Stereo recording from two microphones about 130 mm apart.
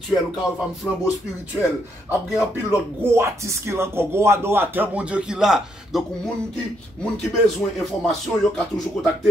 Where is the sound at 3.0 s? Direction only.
20° right (ahead or behind); by 6.0 s 5° right (ahead or behind).